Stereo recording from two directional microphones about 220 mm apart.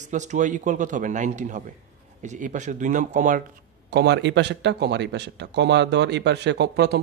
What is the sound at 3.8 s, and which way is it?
Speech, 50° right (ahead or behind).